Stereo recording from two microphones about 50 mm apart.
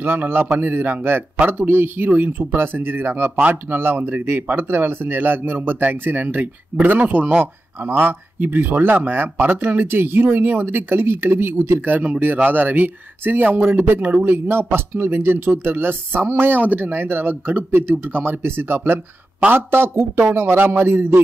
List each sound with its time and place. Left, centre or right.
0.0 s speech: right
7.8 s speech: right